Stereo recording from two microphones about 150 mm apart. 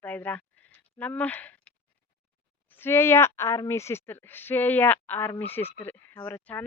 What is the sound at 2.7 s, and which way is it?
Speech, 15° left (ahead or behind).